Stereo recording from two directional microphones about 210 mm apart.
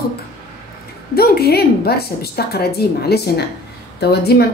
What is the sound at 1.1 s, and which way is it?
Speech, 45° left (ahead or behind).